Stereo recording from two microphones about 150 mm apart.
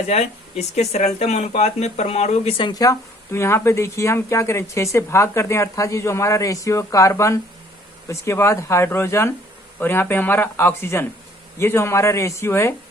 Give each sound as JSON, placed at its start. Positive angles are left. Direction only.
{"t": 0.1, "sound": "speech", "side_deg": 45}